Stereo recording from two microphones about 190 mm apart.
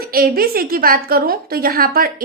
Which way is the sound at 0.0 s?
50° right (ahead or behind).